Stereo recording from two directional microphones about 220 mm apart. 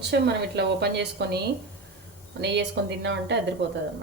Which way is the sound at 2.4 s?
50° right (ahead or behind).